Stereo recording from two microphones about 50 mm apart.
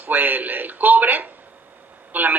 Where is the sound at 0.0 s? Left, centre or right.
Right.